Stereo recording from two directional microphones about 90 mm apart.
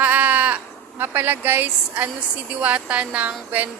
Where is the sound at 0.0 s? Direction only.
15° right (ahead or behind).